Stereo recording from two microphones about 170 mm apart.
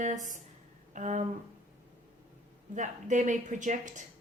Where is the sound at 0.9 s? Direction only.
45° right (ahead or behind).